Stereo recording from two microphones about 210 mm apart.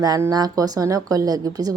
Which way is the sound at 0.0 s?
15° right (ahead or behind).